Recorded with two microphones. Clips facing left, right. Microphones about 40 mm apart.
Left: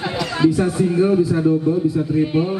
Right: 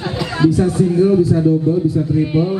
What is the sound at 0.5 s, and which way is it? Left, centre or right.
Speech, left.